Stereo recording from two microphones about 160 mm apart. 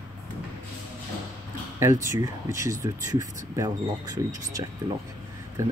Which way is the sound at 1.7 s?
15° right (ahead or behind).